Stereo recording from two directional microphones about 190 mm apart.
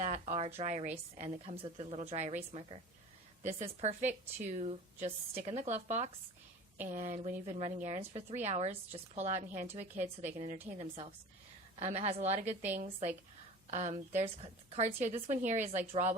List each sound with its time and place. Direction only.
0.0 s a woman's voice: 35° right (ahead or behind)
11.8 s a woman's voice: 35° right (ahead or behind)